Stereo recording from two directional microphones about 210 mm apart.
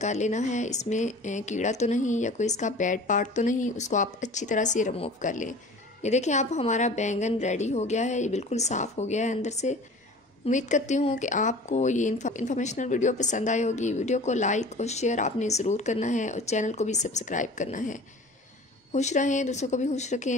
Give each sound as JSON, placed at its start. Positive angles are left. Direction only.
{"t": 0.0, "sound": "speech", "side_deg": 35}